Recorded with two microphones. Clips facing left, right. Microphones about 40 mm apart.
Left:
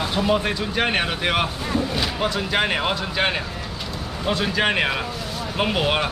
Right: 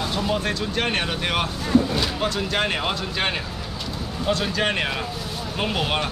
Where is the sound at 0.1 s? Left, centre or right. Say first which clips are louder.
Left 5 dB; centre.